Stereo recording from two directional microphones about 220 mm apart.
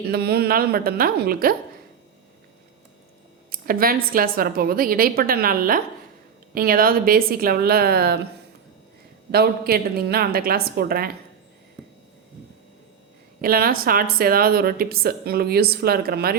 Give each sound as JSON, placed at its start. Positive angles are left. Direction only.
{"t": 0.1, "sound": "speech", "side_deg": -45}
{"t": 3.5, "sound": "a woman's voice", "side_deg": -40}
{"t": 9.3, "sound": "speech", "side_deg": -45}
{"t": 13.4, "sound": "speech", "side_deg": -45}